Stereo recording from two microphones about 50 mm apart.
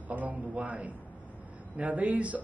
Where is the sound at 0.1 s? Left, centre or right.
Right.